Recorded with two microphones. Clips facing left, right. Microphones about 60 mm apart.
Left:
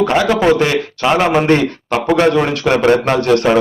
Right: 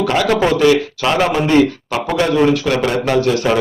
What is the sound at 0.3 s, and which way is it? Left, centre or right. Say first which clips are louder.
Speech: even; centre.